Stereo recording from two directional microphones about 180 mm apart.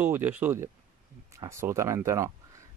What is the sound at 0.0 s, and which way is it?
Speech, 10° right (ahead or behind).